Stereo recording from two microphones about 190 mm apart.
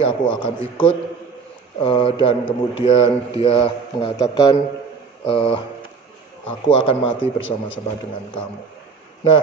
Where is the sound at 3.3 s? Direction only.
30° left (ahead or behind).